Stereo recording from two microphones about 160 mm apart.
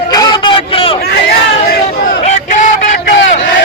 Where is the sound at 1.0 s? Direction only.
75° left (ahead or behind).